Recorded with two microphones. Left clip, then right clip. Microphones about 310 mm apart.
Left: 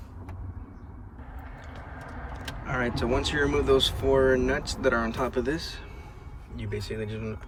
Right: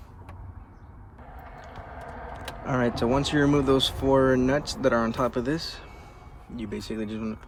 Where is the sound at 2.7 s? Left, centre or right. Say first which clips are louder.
Right 3 dB; centre.